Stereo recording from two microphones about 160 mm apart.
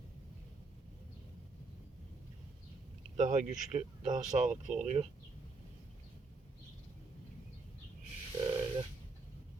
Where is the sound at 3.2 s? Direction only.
45° right (ahead or behind).